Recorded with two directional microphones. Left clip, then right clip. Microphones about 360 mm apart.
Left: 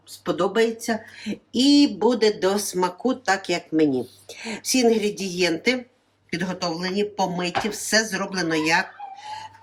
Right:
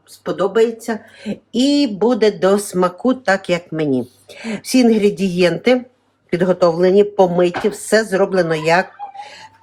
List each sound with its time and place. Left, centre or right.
0.3 s speech: centre
1.3 s speech: centre
9.2 s dog: right